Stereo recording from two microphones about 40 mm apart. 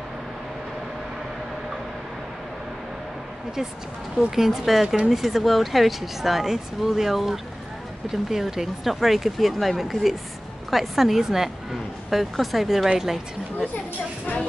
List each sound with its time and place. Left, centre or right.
4.5 s speech: centre
4.8 s speech: right
5.1 s a woman's voice: centre